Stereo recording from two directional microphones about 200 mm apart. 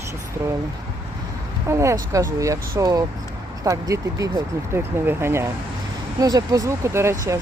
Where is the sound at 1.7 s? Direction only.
15° right (ahead or behind).